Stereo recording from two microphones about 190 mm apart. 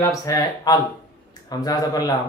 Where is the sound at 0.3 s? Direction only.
20° left (ahead or behind).